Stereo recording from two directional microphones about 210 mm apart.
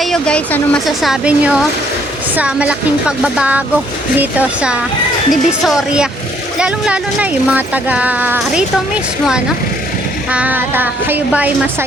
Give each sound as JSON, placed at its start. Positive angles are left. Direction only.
{"t": 0.0, "sound": "speech", "side_deg": 5}
{"t": 10.3, "sound": "speech", "side_deg": -10}